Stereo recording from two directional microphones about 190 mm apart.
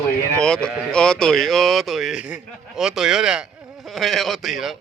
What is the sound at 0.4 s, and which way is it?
Speech, 5° left (ahead or behind).